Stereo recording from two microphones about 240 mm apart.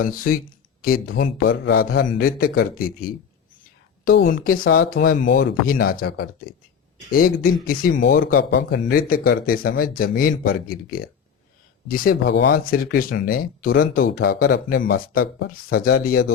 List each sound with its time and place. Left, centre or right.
0.0 s speech: left